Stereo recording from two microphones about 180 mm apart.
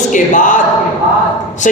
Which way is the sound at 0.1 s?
45° left (ahead or behind).